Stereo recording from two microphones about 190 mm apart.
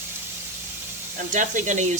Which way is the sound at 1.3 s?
40° right (ahead or behind).